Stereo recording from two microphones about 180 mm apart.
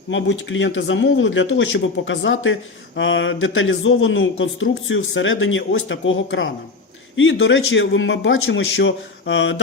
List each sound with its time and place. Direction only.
0.1 s speech: 90° left